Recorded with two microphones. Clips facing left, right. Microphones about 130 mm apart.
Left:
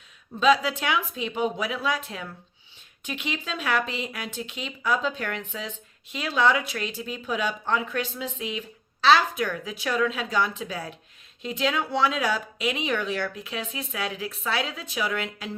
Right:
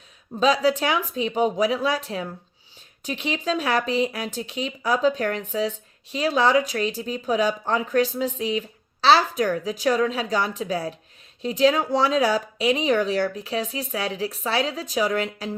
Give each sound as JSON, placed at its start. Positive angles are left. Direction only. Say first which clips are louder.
{"t": 0.3, "sound": "speech", "louder": "right 2 dB", "side_deg": -35}